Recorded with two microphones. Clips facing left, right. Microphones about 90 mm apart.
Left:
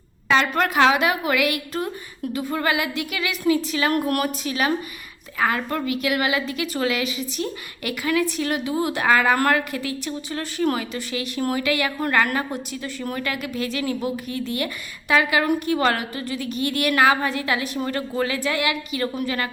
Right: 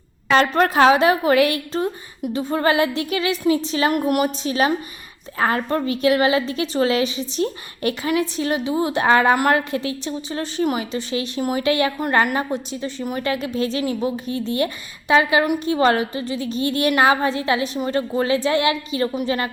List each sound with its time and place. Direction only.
0.3 s a woman's voice: 35° right (ahead or behind)